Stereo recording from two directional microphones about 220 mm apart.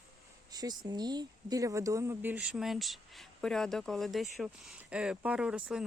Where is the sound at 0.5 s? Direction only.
20° right (ahead or behind).